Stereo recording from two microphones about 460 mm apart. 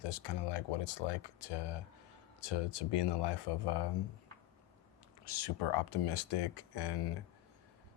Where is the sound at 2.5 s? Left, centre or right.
Left.